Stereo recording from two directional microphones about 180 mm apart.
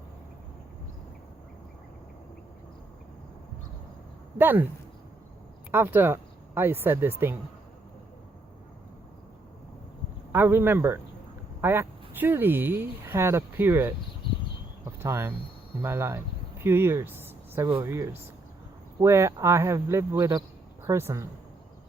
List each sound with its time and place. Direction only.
4.4 s speech: 10° right (ahead or behind)
5.7 s speech: 10° right (ahead or behind)
10.3 s speech: 10° right (ahead or behind)
14.9 s speech: 15° right (ahead or behind)